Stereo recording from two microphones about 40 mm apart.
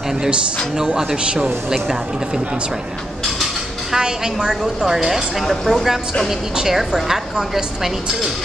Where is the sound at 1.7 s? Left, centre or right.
Centre.